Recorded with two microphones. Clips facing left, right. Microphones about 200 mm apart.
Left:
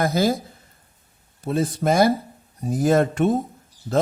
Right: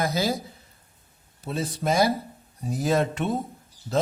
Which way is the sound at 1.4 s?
50° left (ahead or behind).